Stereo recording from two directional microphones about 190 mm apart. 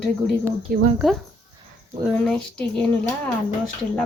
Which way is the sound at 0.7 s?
50° right (ahead or behind).